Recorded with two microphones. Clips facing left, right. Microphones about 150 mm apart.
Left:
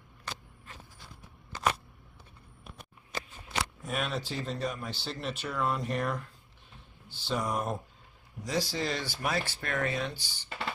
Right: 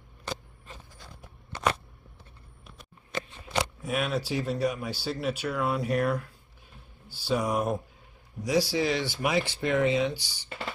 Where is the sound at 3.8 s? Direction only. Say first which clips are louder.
Right 5 dB; 5° right (ahead or behind).